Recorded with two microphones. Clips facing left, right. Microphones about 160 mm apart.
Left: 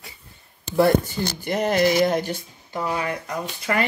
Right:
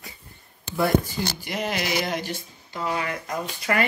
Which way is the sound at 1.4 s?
50° left (ahead or behind).